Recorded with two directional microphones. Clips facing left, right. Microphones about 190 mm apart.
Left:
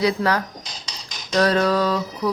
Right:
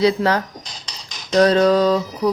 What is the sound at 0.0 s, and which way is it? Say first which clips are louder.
Speech: right 4 dB; 25° right (ahead or behind).